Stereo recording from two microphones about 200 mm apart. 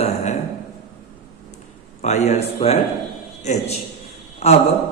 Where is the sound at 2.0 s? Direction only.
35° left (ahead or behind).